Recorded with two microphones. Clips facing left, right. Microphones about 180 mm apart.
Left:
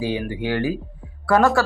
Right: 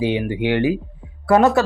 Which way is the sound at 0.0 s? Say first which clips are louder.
Right 4 dB; 20° right (ahead or behind).